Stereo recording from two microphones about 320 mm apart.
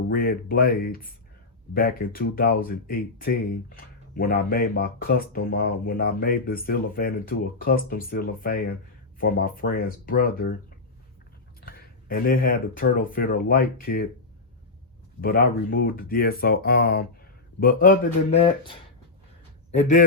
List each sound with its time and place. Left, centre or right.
0.1 s speech: left
11.6 s speech: left
15.2 s speech: left